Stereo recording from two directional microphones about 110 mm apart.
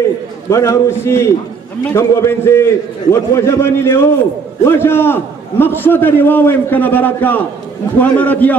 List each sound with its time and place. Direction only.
0.5 s a man's voice: 25° left (ahead or behind)